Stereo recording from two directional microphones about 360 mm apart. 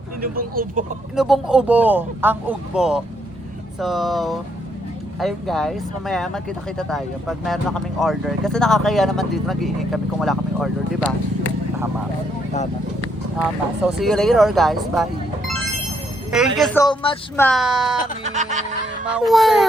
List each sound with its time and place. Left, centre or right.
0.2 s speech: right
1.1 s speech: centre
13.4 s speech: centre
18.2 s speech: centre
19.1 s speech: centre